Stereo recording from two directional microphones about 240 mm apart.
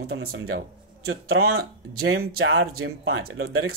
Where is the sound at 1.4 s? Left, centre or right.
Right.